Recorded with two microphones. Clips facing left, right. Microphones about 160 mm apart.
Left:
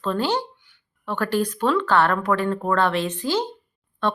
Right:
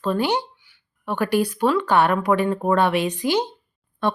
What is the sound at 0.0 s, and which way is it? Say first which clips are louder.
Speech: right 2 dB; 15° right (ahead or behind).